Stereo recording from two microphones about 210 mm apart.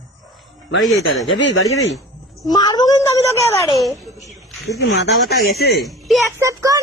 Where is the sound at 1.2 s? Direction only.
60° left (ahead or behind).